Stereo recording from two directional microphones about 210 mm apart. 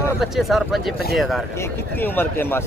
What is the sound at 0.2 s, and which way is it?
Speech, centre (ahead or behind).